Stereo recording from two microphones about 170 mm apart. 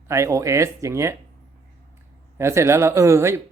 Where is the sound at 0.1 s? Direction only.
15° right (ahead or behind).